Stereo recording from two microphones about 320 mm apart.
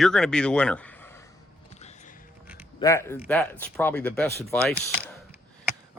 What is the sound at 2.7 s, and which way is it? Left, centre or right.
Speech, centre.